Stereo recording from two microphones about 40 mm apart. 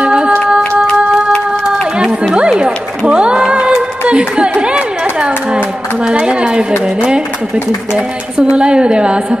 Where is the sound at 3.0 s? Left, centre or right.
Centre.